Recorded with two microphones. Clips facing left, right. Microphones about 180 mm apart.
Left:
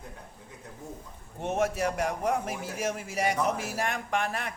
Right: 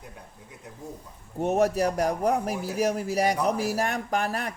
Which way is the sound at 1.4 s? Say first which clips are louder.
Right 5 dB; 40° right (ahead or behind).